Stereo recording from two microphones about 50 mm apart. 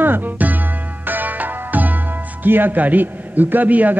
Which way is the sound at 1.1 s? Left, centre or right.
Right.